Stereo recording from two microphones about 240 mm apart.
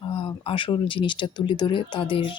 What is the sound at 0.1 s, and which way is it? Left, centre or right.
Speech, left.